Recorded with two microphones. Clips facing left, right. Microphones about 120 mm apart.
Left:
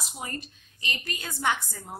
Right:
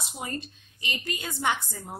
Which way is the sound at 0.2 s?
20° right (ahead or behind).